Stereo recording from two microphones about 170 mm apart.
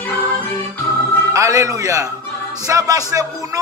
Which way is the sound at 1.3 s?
20° right (ahead or behind).